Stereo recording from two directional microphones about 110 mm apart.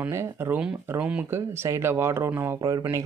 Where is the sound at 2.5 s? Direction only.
35° right (ahead or behind).